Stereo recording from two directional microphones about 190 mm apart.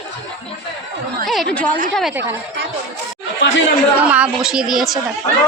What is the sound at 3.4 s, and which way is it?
Speech, 75° left (ahead or behind).